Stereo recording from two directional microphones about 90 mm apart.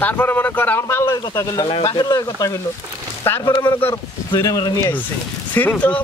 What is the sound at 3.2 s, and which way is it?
Speech, 25° left (ahead or behind).